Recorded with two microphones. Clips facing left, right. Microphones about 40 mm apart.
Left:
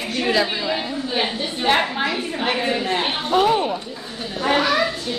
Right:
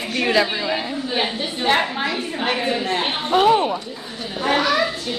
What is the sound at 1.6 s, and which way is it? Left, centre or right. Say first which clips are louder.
A woman's voice: even; centre.